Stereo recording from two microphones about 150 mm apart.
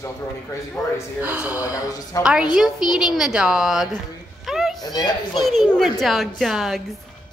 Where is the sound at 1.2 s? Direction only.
10° right (ahead or behind).